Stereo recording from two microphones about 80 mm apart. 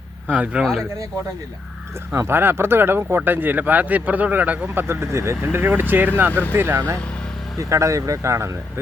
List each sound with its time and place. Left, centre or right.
0.3 s speech: centre
2.1 s speech: right